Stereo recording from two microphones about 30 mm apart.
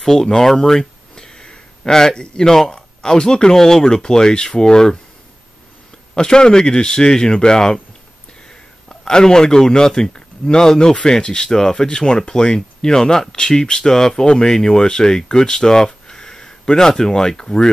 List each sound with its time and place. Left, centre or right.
0.0 s speech: centre
0.6 s a sound: left
2.1 s speech: left
6.1 s speech: left
8.5 s a sound: left
10.1 s speech: left